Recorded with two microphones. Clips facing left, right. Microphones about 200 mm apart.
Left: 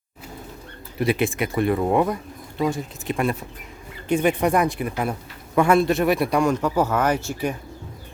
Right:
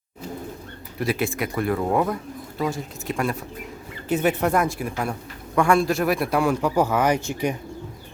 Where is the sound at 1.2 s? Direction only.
Centre (ahead or behind); by 7.5 s 15° right (ahead or behind).